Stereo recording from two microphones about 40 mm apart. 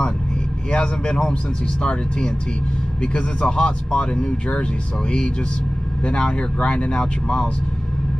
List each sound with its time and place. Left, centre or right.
0.7 s speech: left
6.0 s speech: left